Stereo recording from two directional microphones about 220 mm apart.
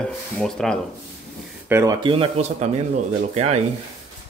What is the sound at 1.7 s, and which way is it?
Speech, 15° right (ahead or behind).